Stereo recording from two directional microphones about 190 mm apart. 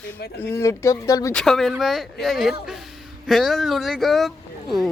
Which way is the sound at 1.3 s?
Centre (ahead or behind).